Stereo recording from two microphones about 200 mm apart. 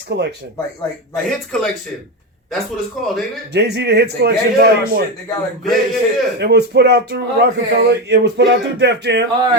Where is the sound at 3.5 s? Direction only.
55° right (ahead or behind).